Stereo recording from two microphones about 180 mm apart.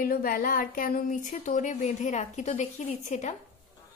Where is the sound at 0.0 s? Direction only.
50° left (ahead or behind).